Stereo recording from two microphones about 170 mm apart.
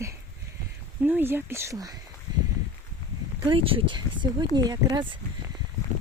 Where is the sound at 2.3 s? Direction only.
25° right (ahead or behind).